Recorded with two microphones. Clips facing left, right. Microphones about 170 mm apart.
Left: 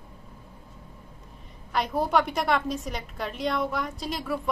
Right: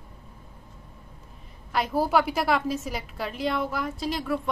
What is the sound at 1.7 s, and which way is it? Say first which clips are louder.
A woman's voice: right 1 dB; centre (ahead or behind).